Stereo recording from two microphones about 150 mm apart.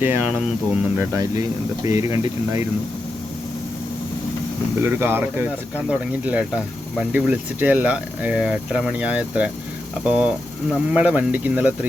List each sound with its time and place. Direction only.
0.0 s speech: 15° right (ahead or behind)
1.1 s speech: 20° right (ahead or behind)
4.8 s speech: 15° right (ahead or behind)